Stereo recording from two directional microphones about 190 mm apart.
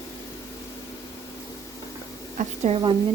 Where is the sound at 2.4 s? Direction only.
35° right (ahead or behind).